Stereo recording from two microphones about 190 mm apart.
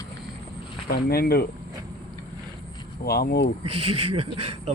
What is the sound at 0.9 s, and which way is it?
Speech, 55° left (ahead or behind).